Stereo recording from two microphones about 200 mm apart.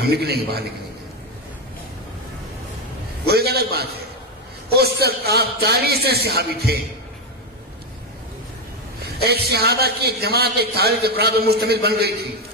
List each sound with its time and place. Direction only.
0.0 s a man's voice: 55° right (ahead or behind)
3.3 s a man's voice: 55° right (ahead or behind)
9.0 s a man's voice: 55° right (ahead or behind)